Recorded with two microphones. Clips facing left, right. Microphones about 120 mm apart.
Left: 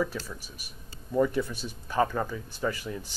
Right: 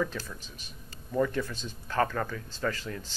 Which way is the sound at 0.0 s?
10° left (ahead or behind).